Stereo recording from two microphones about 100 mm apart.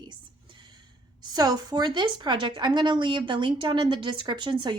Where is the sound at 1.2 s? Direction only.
45° right (ahead or behind).